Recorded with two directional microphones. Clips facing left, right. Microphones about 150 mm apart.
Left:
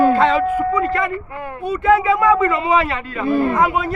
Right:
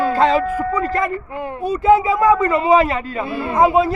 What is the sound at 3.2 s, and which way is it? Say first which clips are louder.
Speech: left 8 dB; 45° left (ahead or behind).